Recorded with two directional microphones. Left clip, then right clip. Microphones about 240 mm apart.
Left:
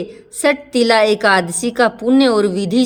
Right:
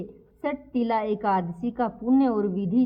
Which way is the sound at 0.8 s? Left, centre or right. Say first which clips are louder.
Left 12 dB; centre.